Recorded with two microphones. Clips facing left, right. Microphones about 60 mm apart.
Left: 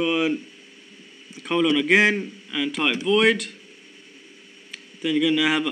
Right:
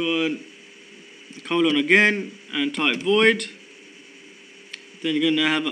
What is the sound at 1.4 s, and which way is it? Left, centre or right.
Speech, centre.